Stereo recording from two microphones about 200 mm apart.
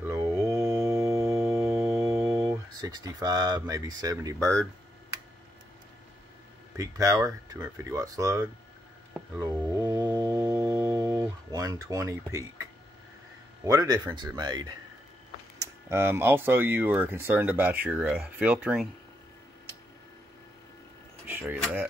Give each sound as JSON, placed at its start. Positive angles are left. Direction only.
{"t": 0.0, "sound": "music", "side_deg": -15}
{"t": 1.7, "sound": "organ", "side_deg": 0}
{"t": 2.8, "sound": "speech", "side_deg": -20}
{"t": 6.8, "sound": "speech", "side_deg": -15}
{"t": 9.4, "sound": "a sound", "side_deg": -20}
{"t": 13.7, "sound": "speech", "side_deg": -15}
{"t": 21.3, "sound": "speech", "side_deg": -10}